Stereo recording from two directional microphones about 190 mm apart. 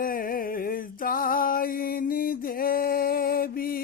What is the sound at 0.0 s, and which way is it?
Music, 50° left (ahead or behind).